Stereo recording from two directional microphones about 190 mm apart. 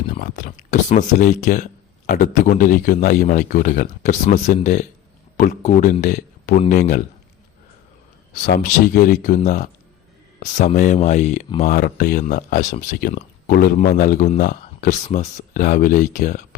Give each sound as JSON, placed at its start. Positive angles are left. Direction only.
{"t": 0.2, "sound": "speech", "side_deg": 40}
{"t": 8.4, "sound": "speech", "side_deg": 50}
{"t": 12.2, "sound": "speech", "side_deg": 40}
{"t": 12.9, "sound": "speech", "side_deg": 50}